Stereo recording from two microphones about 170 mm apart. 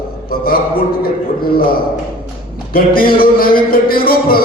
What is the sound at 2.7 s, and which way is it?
A man's voice, 60° left (ahead or behind).